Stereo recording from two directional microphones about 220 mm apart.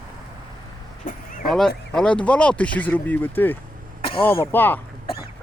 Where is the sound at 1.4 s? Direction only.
Centre (ahead or behind).